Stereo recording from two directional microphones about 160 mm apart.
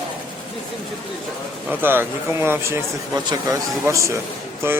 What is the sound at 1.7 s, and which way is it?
Speech, 15° right (ahead or behind).